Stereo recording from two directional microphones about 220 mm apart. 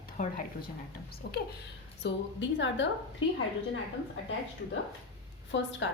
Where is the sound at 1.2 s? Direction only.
45° left (ahead or behind).